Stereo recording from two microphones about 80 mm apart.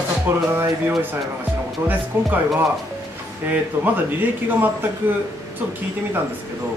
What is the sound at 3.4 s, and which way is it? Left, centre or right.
Speech, right.